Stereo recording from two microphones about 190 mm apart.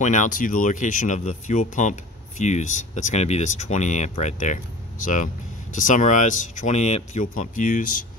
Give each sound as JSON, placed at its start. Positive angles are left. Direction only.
{"t": 0.0, "sound": "speech", "side_deg": 40}